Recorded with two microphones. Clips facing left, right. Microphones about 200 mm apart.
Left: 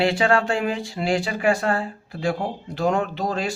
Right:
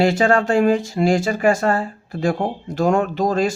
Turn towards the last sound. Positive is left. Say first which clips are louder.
# right 7 dB
turn(degrees=-45)  # may be behind; listen again after turning